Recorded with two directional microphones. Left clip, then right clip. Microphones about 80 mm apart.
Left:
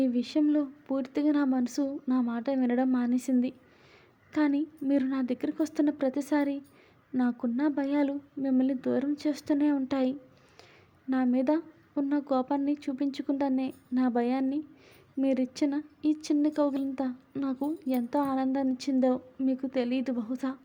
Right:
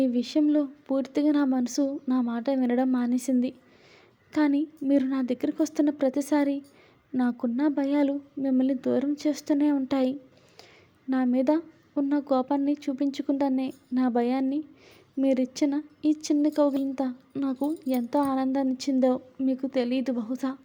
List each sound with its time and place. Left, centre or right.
0.0 s speech: right